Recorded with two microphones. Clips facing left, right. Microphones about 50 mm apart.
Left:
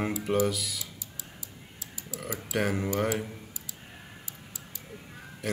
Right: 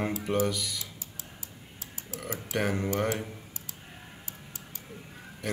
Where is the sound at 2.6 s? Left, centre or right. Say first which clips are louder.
Left 1 dB; centre.